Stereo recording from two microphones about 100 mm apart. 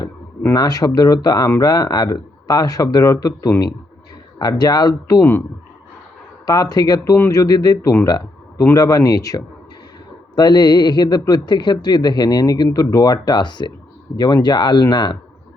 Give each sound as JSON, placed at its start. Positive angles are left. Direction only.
{"t": 0.5, "sound": "speech", "side_deg": 40}
{"t": 6.4, "sound": "speech", "side_deg": 40}
{"t": 7.0, "sound": "speech", "side_deg": 30}
{"t": 7.8, "sound": "speech", "side_deg": 25}
{"t": 8.0, "sound": "a sound", "side_deg": 40}
{"t": 8.7, "sound": "speech", "side_deg": 35}